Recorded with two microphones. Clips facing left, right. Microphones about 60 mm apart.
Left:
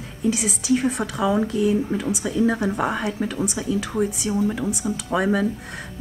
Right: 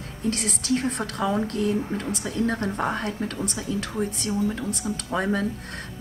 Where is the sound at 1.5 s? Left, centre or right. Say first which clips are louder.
Left 4 dB; right.